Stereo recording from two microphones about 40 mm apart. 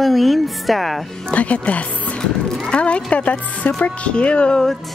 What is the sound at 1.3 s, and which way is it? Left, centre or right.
Speech, left.